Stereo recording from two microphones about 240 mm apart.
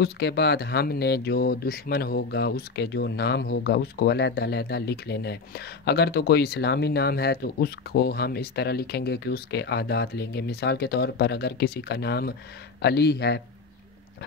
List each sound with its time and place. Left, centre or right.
0.0 s speech: left